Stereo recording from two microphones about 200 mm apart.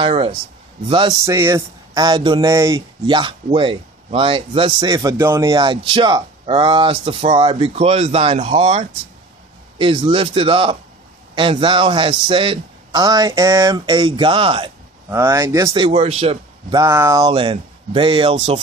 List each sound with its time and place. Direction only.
0.0 s speech: 25° right (ahead or behind)
1.2 s speech: 15° right (ahead or behind)
15.0 s speech: 15° right (ahead or behind); by 16.3 s 30° right (ahead or behind)
16.7 s speech: 15° right (ahead or behind)